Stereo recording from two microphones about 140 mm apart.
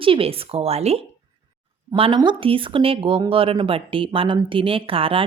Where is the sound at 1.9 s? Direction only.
35° right (ahead or behind).